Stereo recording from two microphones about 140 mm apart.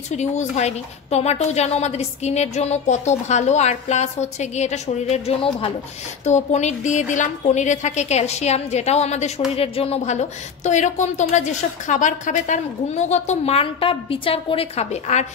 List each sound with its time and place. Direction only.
0.1 s a woman's voice: 55° left (ahead or behind)
6.2 s a woman's voice: 55° left (ahead or behind)